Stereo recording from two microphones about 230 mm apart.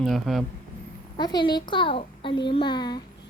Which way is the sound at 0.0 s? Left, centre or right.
Centre.